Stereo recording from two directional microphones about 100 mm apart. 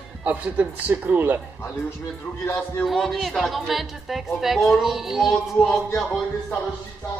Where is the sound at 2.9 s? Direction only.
Centre (ahead or behind).